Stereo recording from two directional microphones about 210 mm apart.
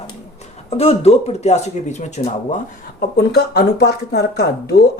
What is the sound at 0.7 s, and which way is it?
Speech, 30° left (ahead or behind).